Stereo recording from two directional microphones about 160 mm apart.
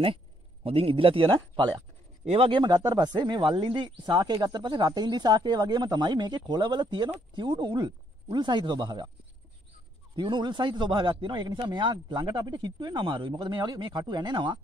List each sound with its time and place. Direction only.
0.7 s speech: 35° right (ahead or behind)
10.1 s speech: 30° right (ahead or behind)